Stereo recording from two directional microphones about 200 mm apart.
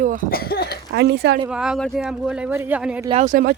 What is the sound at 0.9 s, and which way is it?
Speech, 55° right (ahead or behind).